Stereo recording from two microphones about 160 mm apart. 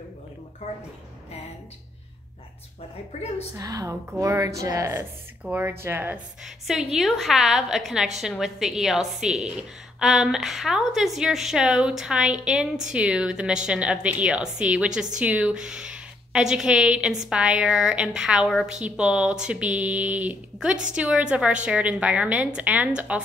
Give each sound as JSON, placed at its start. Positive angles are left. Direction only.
{"t": 3.1, "sound": "a woman's voice", "side_deg": 40}
{"t": 3.5, "sound": "a woman's voice", "side_deg": -20}
{"t": 6.7, "sound": "a woman's voice", "side_deg": 0}